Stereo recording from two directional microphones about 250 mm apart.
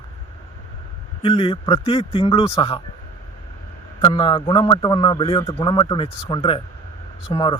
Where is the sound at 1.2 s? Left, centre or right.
Left.